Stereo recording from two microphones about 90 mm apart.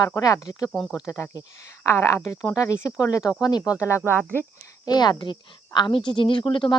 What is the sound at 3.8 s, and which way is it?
Speech, 30° left (ahead or behind).